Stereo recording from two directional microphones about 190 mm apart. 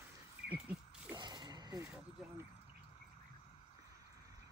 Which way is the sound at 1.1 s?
25° right (ahead or behind).